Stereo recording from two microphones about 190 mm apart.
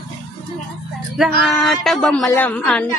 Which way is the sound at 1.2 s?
Centre (ahead or behind).